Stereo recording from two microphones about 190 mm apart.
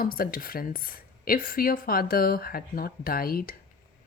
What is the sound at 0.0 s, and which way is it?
Speech, 50° left (ahead or behind).